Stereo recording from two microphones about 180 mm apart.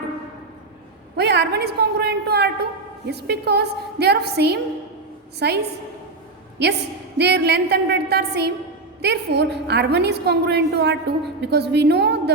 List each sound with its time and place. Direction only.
1.1 s a woman's voice: 70° right (ahead or behind)
7.2 s a woman's voice: 65° right (ahead or behind)